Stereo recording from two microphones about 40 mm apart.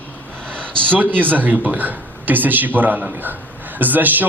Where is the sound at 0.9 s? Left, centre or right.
Right.